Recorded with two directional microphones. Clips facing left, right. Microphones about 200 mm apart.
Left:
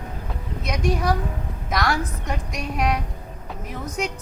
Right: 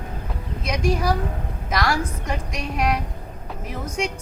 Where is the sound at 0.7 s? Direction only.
Centre (ahead or behind).